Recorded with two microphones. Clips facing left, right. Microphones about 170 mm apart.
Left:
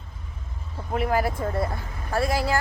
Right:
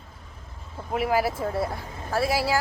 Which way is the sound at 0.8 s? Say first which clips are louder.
Even; 5° right (ahead or behind).